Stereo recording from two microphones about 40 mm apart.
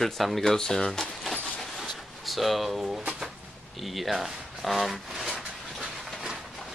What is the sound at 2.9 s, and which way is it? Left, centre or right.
Speech, centre.